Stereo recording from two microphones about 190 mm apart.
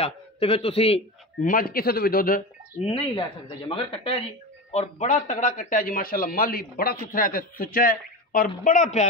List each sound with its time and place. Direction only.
0.0 s a man's voice: 30° left (ahead or behind)
1.4 s a man's voice: 50° left (ahead or behind)
2.8 s speech: 30° left (ahead or behind)
4.7 s a man's voice: 40° left (ahead or behind)